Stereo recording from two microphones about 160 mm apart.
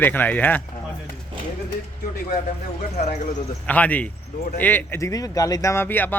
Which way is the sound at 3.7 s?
10° left (ahead or behind).